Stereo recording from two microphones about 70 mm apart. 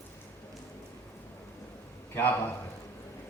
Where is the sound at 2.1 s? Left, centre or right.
Left.